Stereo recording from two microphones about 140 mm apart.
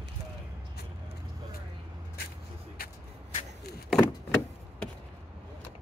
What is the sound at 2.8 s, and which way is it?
Vehicle, 90° left.